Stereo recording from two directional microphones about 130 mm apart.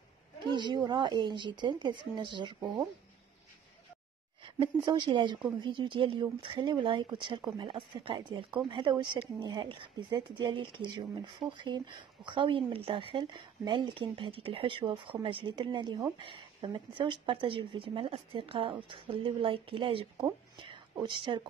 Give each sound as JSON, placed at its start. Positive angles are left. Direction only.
{"t": 0.5, "sound": "speech", "side_deg": -35}
{"t": 4.4, "sound": "speech", "side_deg": -40}
{"t": 20.5, "sound": "whispering", "side_deg": -40}